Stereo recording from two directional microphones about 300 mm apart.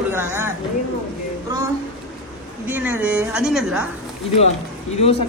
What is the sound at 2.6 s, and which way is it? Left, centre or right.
A woman's voice, centre.